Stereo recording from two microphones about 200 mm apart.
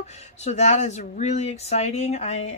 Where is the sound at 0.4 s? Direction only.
35° left (ahead or behind).